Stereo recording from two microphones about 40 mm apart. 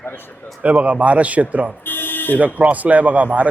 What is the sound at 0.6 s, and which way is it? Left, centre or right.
Speech, right.